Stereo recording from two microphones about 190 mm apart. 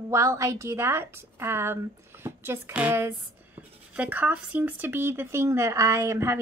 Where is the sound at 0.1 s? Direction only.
15° right (ahead or behind).